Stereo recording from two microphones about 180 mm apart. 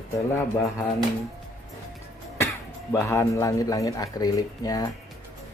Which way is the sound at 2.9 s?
15° left (ahead or behind).